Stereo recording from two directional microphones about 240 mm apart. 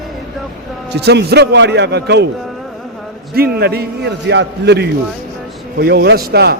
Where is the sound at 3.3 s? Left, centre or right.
Right.